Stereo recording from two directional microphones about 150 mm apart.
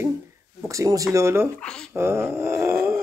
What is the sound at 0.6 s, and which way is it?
Speech, 20° right (ahead or behind).